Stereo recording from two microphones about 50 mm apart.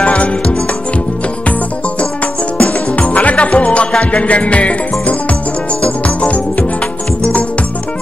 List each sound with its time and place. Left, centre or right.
0.0 s music: left
2.5 s music: left